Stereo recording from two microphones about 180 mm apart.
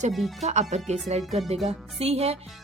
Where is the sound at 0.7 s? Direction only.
40° right (ahead or behind).